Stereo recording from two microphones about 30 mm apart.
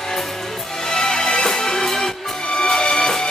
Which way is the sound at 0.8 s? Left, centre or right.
Left.